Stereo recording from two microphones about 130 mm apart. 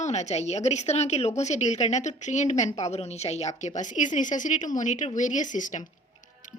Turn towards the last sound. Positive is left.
turn(degrees=70)  # may be behind; listen again after turning